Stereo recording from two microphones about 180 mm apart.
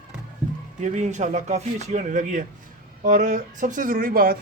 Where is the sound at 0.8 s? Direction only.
40° right (ahead or behind).